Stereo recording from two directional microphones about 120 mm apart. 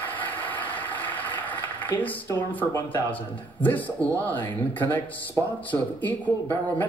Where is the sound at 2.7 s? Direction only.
15° left (ahead or behind).